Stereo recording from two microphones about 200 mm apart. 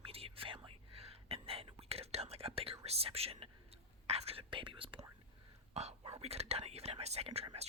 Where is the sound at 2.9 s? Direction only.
30° right (ahead or behind).